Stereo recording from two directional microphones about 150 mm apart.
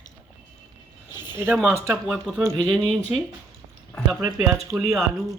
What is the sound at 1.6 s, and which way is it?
Speech, 15° right (ahead or behind).